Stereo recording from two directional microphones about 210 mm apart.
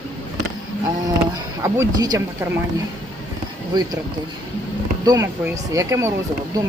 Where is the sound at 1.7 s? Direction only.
20° right (ahead or behind).